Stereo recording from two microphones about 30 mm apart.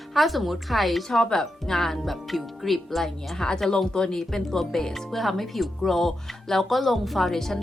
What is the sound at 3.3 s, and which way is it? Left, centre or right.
Speech, centre.